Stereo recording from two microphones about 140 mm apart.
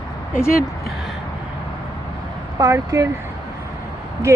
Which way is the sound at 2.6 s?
25° right (ahead or behind).